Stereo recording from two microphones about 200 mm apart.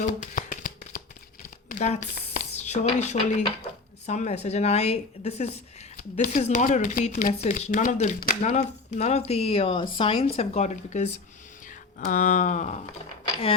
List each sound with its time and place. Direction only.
0.0 s shuffling cards: 40° left (ahead or behind)
1.7 s a woman's voice: 35° left (ahead or behind)